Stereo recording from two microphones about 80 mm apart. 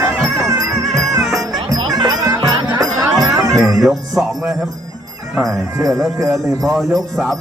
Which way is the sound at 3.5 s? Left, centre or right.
Centre.